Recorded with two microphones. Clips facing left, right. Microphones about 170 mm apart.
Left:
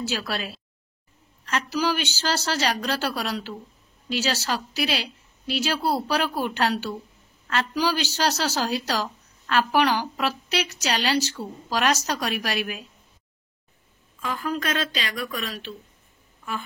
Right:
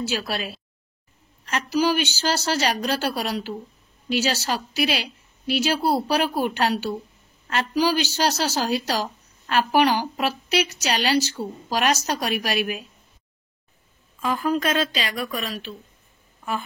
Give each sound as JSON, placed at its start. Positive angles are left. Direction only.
{"t": 0.1, "sound": "speech", "side_deg": -15}
{"t": 1.8, "sound": "speech", "side_deg": -15}
{"t": 14.2, "sound": "speech", "side_deg": -10}